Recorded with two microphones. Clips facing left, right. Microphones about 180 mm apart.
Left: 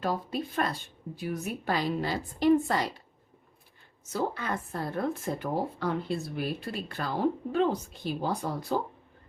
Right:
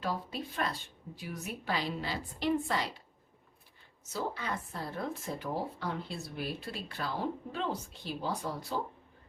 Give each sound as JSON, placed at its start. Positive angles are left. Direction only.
{"t": 0.0, "sound": "speech", "side_deg": 45}
{"t": 4.1, "sound": "speech", "side_deg": 50}